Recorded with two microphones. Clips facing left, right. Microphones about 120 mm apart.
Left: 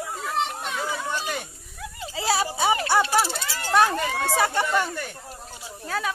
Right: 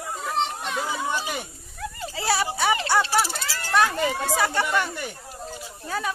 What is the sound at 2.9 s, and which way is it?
Dog, 20° left (ahead or behind).